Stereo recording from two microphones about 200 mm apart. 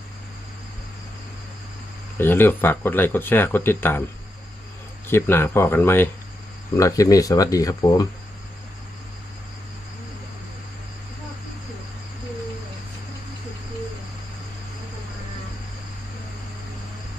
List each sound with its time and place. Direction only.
2.1 s speech: 10° left (ahead or behind)
5.0 s speech: 10° left (ahead or behind)